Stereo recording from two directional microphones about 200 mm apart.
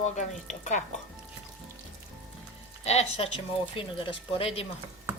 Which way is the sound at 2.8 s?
30° left (ahead or behind).